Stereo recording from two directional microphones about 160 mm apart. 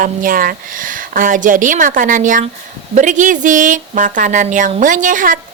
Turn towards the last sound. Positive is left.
turn(degrees=-55)  # may be behind; listen again after turning